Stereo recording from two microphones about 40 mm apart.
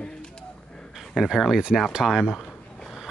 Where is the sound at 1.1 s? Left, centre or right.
Centre.